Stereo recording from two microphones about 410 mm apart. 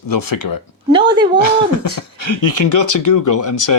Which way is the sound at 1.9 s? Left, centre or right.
Left.